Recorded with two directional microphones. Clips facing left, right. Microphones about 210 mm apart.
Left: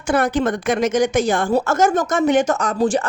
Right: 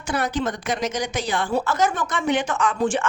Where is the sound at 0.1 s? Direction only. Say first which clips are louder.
Left 6 dB; 50° left (ahead or behind).